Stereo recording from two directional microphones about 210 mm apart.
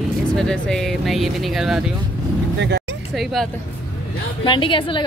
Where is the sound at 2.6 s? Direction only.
55° right (ahead or behind).